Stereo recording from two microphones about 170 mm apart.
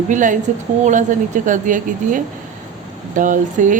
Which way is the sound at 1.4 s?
50° right (ahead or behind).